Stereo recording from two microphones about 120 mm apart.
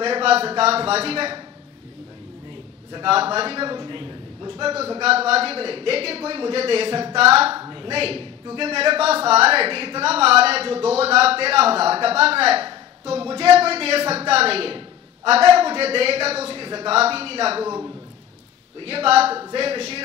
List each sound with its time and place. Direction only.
0.0 s a man's voice: 55° right (ahead or behind)
2.9 s a man's voice: 50° right (ahead or behind)
5.0 s a man's voice: 60° right (ahead or behind)
7.5 s a man's voice: 35° right (ahead or behind); by 17.6 s 55° right (ahead or behind)
17.6 s a man's voice: 25° right (ahead or behind)
18.8 s a man's voice: 50° right (ahead or behind)